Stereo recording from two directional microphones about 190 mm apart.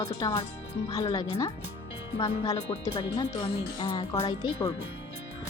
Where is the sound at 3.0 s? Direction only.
25° left (ahead or behind).